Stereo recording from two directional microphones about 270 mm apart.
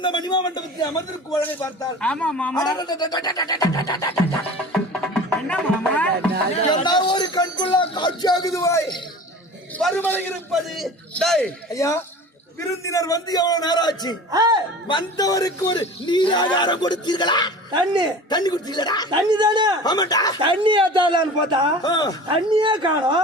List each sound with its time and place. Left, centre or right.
0.0 s a man's voice: centre
4.7 s music: centre
6.7 s a man's voice: centre
14.3 s speech: centre
14.8 s a man's voice: centre
17.7 s speech: centre
18.3 s a man's voice: centre
19.1 s speech: centre
19.8 s a man's voice: centre
20.4 s speech: centre
21.8 s a man's voice: centre
22.3 s speech: centre